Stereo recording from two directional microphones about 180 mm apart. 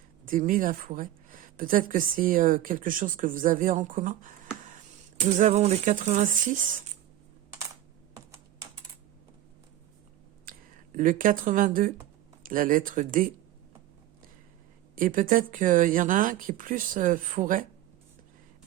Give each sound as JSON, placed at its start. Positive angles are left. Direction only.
{"t": 0.3, "sound": "speech", "side_deg": -50}
{"t": 10.5, "sound": "a sound", "side_deg": -50}
{"t": 10.9, "sound": "speech", "side_deg": -50}
{"t": 14.9, "sound": "speech", "side_deg": -50}